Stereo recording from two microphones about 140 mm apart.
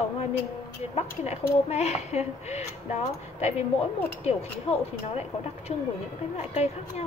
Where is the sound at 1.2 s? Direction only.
50° left (ahead or behind).